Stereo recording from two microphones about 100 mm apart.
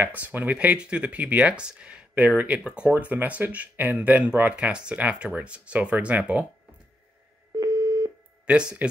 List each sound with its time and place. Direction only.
0.0 s speech: 15° right (ahead or behind)
7.5 s busy signal: 35° right (ahead or behind)
8.5 s speech: 10° right (ahead or behind)